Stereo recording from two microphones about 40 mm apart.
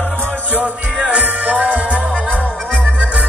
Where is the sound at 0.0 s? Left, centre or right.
Left.